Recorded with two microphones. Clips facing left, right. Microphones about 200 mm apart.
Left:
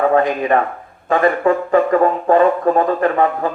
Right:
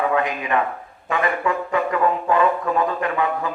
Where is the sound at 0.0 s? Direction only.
40° left (ahead or behind).